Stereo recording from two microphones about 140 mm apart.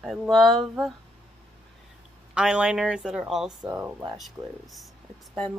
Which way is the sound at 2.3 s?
5° right (ahead or behind).